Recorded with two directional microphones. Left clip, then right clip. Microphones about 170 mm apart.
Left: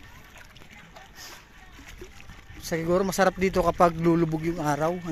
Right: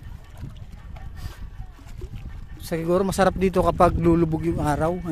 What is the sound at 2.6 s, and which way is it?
Speech, 35° right (ahead or behind).